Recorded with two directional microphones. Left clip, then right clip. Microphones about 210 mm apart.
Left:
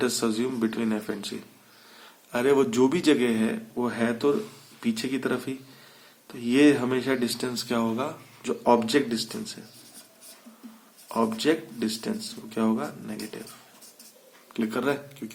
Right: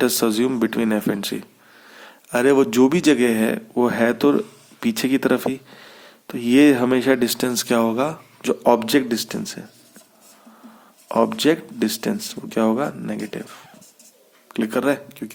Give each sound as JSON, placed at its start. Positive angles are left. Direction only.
{"t": 0.0, "sound": "speech", "side_deg": -45}
{"t": 11.1, "sound": "speech", "side_deg": -40}
{"t": 14.5, "sound": "speech", "side_deg": -40}